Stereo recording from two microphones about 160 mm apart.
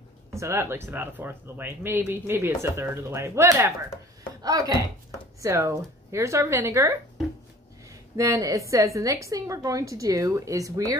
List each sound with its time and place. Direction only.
0.3 s speech: 15° right (ahead or behind)
8.2 s a woman's voice: 20° right (ahead or behind)